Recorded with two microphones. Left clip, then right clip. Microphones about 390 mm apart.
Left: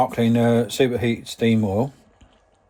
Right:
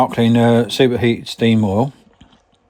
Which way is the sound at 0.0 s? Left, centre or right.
Right.